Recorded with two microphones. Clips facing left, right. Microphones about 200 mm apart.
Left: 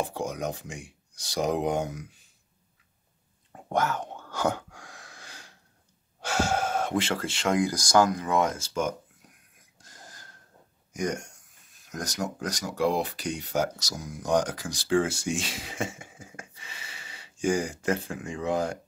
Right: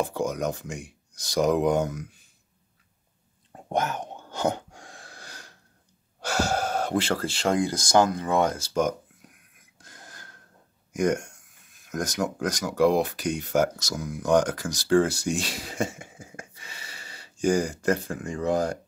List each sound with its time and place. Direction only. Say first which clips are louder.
0.0 s speech: right 4 dB; 45° right (ahead or behind)
3.5 s whispering: even; 20° right (ahead or behind); by 5.6 s 40° right (ahead or behind)
6.2 s speech: right 1 dB; 40° right (ahead or behind)
9.8 s a sound: right 2 dB; 60° right (ahead or behind)
10.9 s speech: right 6 dB; 55° right (ahead or behind)